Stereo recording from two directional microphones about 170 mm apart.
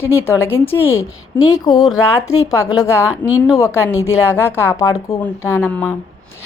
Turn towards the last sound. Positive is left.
turn(degrees=15)  # may be behind; listen again after turning